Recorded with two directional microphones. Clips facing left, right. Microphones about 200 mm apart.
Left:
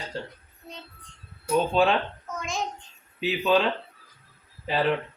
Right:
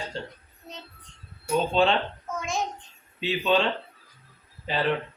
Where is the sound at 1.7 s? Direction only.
5° left (ahead or behind).